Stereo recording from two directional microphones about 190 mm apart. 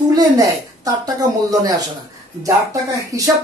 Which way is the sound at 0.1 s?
20° right (ahead or behind).